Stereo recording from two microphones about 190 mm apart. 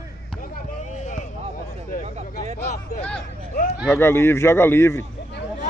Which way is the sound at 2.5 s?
35° left (ahead or behind).